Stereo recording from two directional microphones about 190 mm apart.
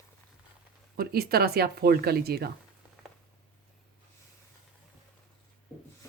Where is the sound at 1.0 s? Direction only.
55° right (ahead or behind).